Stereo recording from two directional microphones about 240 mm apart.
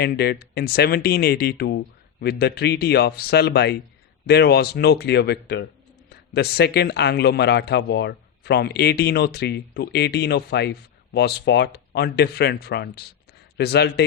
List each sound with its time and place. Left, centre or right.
0.0 s a man's voice: left